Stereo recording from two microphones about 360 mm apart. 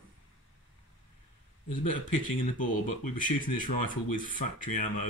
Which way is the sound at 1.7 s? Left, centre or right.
Left.